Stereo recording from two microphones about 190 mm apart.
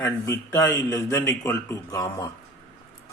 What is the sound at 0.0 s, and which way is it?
A man's voice, 15° left (ahead or behind).